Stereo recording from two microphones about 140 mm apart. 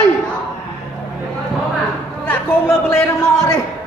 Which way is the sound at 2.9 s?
20° left (ahead or behind).